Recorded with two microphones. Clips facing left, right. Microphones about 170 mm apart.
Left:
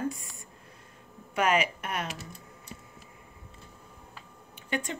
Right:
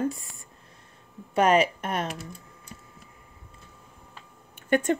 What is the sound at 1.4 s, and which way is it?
Speech, 35° right (ahead or behind).